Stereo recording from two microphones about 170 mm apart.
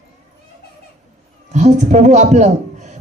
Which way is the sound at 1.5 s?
45° right (ahead or behind).